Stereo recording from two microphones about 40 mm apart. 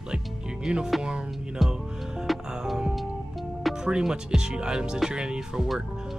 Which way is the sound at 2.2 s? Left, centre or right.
Centre.